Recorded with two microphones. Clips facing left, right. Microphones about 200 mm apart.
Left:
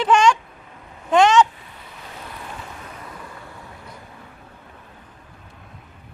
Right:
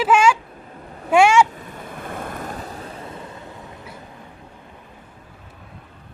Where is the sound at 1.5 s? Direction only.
45° right (ahead or behind); by 3.5 s 25° right (ahead or behind).